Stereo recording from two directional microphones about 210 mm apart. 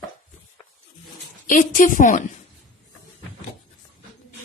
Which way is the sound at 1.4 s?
40° left (ahead or behind).